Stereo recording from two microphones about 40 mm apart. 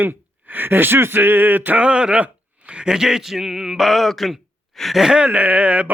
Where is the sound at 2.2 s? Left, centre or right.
Right.